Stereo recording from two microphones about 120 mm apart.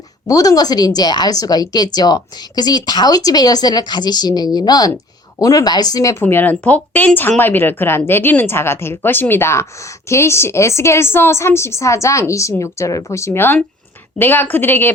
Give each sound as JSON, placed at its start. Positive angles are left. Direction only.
{"t": 0.3, "sound": "a woman's voice", "side_deg": 30}